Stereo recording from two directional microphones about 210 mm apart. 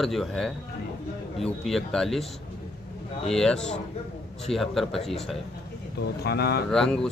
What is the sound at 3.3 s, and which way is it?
Speech, 5° left (ahead or behind).